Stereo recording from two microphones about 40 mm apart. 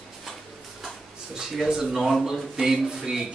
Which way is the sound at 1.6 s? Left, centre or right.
Centre.